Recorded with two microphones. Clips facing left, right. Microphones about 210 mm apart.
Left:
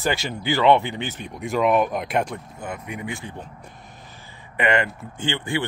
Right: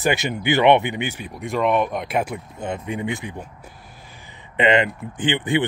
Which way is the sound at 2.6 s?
25° right (ahead or behind).